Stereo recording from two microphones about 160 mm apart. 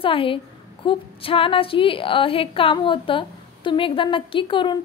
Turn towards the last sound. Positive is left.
turn(degrees=30)  # may be behind; listen again after turning